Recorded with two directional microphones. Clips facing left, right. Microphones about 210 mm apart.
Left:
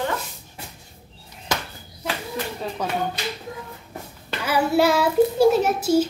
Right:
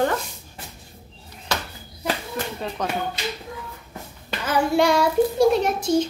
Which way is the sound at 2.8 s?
10° left (ahead or behind).